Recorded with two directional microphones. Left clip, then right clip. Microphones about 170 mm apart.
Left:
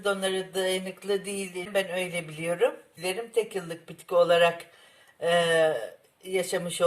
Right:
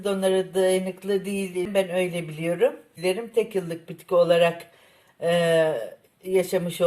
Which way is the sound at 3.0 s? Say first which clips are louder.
Right 5 dB; 25° left (ahead or behind).